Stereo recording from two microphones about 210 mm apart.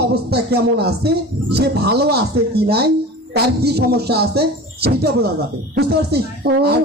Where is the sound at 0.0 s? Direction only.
50° right (ahead or behind).